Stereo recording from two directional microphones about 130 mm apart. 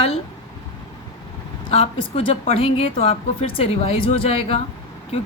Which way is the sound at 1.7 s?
45° left (ahead or behind).